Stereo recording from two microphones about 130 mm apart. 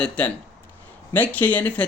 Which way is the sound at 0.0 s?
10° left (ahead or behind).